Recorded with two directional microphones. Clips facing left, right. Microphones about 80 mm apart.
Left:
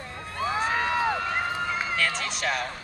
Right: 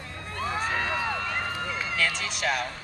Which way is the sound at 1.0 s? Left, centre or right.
Centre.